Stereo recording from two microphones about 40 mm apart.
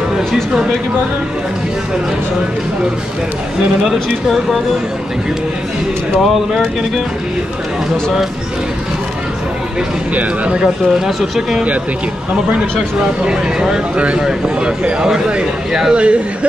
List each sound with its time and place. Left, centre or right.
3.8 s speech: centre
6.1 s speech: centre
10.1 s speech: right
10.6 s speech: centre
13.2 s speech: right
15.0 s speech: centre
15.9 s speech: right